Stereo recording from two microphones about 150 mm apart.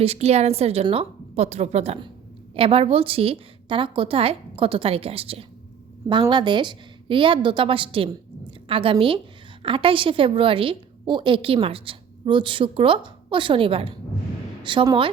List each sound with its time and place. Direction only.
0.0 s a woman's voice: 45° right (ahead or behind)